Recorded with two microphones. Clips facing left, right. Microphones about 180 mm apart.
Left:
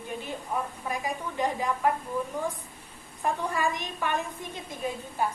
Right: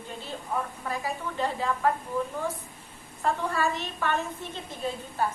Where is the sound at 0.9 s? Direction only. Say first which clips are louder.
Even; 15° left (ahead or behind).